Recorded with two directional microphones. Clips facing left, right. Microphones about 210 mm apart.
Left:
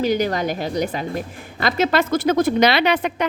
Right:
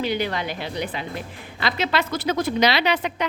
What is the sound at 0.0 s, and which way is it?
A woman's voice, 45° left (ahead or behind).